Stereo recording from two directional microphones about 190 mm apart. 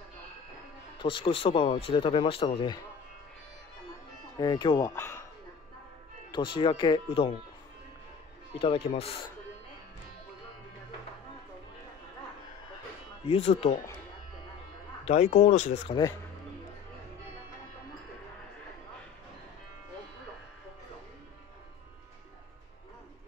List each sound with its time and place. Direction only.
0.9 s speech: 25° left (ahead or behind)
4.4 s speech: 20° left (ahead or behind)
6.3 s speech: 25° left (ahead or behind)
8.5 s speech: 30° left (ahead or behind)
13.3 s speech: 30° left (ahead or behind)
15.0 s speech: 40° left (ahead or behind)